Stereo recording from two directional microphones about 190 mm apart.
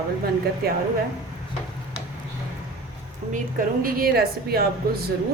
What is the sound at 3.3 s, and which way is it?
A woman's voice, 50° right (ahead or behind).